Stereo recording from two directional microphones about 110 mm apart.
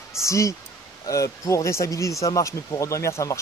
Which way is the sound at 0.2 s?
30° left (ahead or behind).